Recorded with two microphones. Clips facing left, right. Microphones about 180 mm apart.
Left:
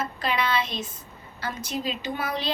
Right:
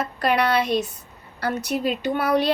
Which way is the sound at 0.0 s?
65° right (ahead or behind).